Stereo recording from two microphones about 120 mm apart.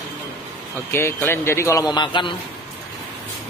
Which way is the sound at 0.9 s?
20° left (ahead or behind).